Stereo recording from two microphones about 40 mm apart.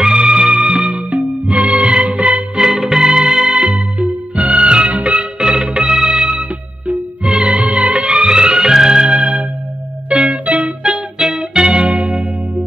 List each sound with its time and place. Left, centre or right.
0.0 s music: centre
1.1 s music: right
2.5 s music: centre
3.7 s music: right
5.4 s music: right
6.9 s music: right
8.1 s music: right
9.1 s a sound: right
10.1 s music: right
10.4 s music: right
10.8 s music: centre
11.9 s church bell: right